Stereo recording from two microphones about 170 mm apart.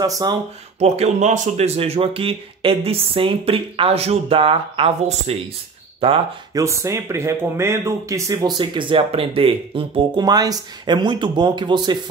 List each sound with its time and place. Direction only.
0.0 s speech: 20° right (ahead or behind)
0.7 s speech: 40° right (ahead or behind)
6.5 s speech: 15° right (ahead or behind)